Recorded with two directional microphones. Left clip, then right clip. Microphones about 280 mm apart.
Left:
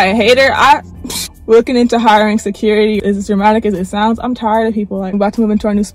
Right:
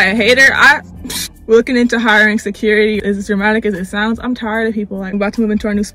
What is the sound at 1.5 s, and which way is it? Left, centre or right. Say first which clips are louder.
Speech: left 2 dB; left.